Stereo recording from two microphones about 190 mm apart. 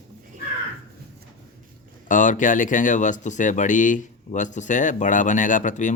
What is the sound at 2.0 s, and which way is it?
Speech, 40° left (ahead or behind).